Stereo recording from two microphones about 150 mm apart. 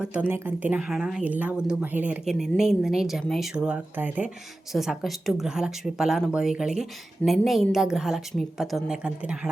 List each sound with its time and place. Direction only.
0.0 s a woman's voice: 10° right (ahead or behind)